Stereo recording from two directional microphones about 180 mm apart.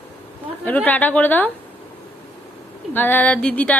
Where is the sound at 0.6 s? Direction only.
10° left (ahead or behind).